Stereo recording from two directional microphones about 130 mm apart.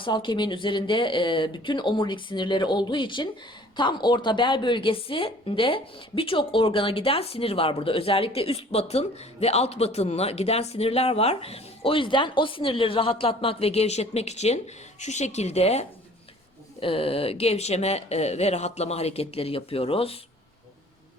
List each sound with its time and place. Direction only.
0.0 s a woman's voice: 40° left (ahead or behind)